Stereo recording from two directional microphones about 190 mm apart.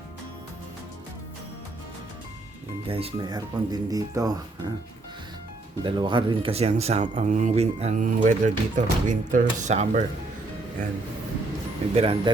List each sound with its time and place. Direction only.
2.8 s speech: 30° right (ahead or behind)
5.8 s speech: 25° right (ahead or behind); by 10.0 s 40° right (ahead or behind)
11.9 s speech: 30° right (ahead or behind)